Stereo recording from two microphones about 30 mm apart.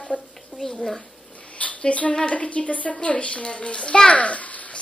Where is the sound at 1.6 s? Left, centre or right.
Left.